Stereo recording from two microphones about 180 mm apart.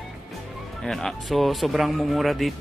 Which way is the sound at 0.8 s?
Centre (ahead or behind).